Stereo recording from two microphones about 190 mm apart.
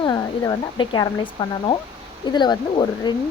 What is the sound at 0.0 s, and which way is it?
Speech, 20° left (ahead or behind).